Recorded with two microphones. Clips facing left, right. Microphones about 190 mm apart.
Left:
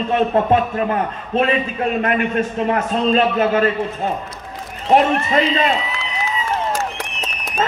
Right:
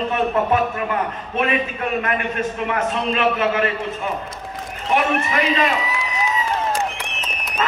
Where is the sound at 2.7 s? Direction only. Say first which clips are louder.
Left 5 dB; 35° left (ahead or behind).